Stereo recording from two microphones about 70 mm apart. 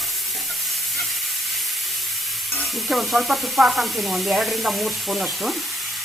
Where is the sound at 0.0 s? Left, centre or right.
Centre.